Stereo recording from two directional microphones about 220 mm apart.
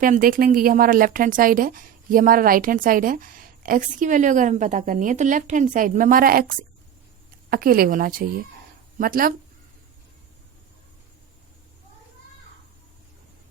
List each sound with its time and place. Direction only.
0.0 s a woman's voice: 40° right (ahead or behind)